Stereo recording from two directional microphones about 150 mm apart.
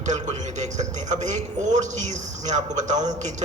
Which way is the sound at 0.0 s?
50° right (ahead or behind).